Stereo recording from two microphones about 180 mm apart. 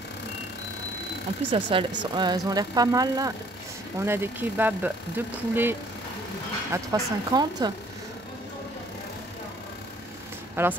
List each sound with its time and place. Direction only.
1.5 s speech: 30° right (ahead or behind)
10.5 s speech: 10° right (ahead or behind)